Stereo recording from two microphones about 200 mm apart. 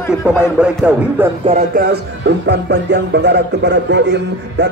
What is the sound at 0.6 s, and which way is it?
Speech, 5° right (ahead or behind).